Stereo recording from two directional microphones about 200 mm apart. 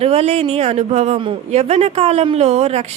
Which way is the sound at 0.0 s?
30° right (ahead or behind).